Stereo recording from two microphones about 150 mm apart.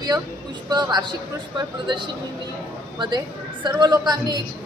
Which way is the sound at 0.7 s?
30° right (ahead or behind).